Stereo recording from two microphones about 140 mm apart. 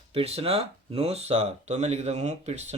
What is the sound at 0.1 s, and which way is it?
Speech, 45° right (ahead or behind).